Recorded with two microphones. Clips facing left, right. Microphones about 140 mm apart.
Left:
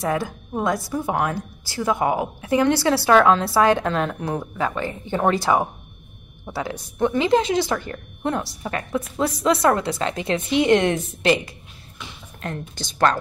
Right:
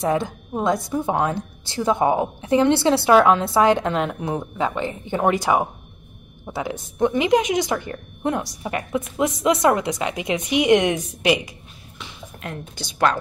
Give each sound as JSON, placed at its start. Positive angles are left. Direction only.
{"t": 0.0, "sound": "a woman's voice", "side_deg": -20}